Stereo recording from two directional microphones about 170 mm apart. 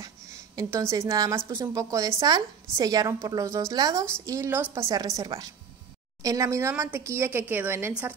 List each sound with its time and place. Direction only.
0.0 s a woman's voice: 20° right (ahead or behind)